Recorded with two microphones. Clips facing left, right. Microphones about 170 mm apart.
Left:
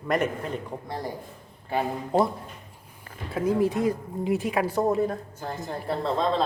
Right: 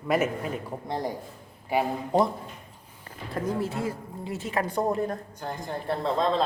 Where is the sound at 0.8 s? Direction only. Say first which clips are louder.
Right 2 dB; 20° right (ahead or behind).